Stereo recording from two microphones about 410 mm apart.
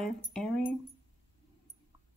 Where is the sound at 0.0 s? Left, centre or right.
Centre.